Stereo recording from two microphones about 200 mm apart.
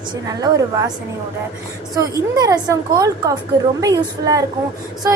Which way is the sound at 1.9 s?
15° right (ahead or behind).